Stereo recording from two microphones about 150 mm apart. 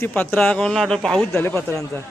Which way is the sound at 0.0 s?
10° left (ahead or behind).